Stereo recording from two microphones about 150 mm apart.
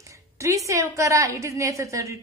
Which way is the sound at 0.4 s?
20° right (ahead or behind).